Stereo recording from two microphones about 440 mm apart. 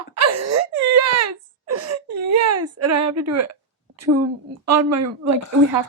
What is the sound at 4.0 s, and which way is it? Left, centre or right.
A woman's voice, right.